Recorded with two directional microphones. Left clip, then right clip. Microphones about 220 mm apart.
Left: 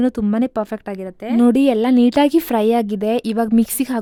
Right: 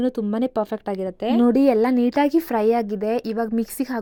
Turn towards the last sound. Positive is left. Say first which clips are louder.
# left 6 dB
turn(degrees=50)  # may be behind; listen again after turning